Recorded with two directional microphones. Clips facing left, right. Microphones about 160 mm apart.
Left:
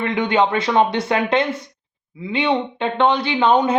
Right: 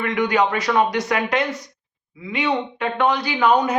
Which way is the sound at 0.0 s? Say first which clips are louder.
Left 1 dB; 25° left (ahead or behind).